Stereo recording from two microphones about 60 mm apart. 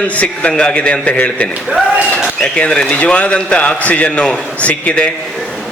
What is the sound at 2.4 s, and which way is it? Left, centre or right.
A man's voice, centre.